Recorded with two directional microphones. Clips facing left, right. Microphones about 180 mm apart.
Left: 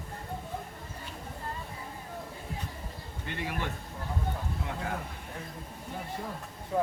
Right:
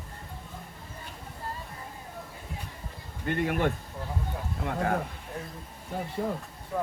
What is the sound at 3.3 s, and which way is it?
Speech, 50° right (ahead or behind).